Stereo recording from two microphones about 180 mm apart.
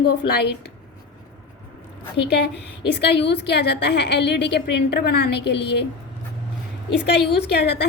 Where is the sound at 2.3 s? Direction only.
70° left (ahead or behind).